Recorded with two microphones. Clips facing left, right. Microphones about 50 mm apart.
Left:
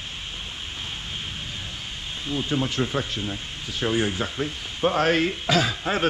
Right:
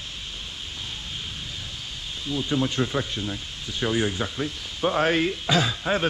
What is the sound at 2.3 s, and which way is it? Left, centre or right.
Speech, left.